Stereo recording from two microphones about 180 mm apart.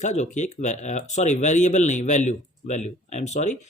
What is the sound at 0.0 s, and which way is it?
Speech, 40° left (ahead or behind).